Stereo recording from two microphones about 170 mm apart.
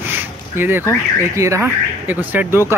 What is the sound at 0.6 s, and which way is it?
Speech, 15° right (ahead or behind).